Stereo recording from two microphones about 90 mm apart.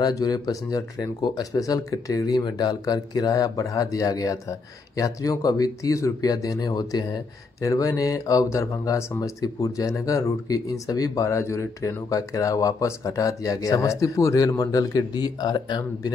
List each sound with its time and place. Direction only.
0.0 s speech: 45° left (ahead or behind)
7.6 s speech: 40° left (ahead or behind)